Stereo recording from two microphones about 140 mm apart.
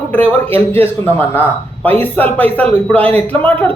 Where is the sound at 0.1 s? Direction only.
15° left (ahead or behind).